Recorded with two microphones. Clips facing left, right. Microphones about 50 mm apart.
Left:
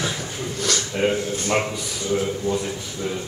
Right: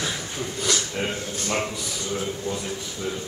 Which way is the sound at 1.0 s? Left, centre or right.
Centre.